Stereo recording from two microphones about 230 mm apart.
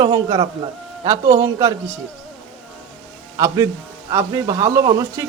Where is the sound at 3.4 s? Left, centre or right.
Centre.